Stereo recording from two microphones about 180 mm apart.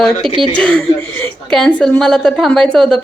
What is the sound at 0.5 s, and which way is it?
A woman's voice, 5° left (ahead or behind).